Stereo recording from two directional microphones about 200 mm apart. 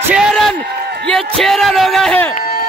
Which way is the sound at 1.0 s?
5° left (ahead or behind).